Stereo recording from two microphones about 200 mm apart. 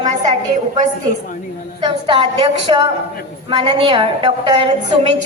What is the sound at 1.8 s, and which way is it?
A woman's voice, 25° right (ahead or behind).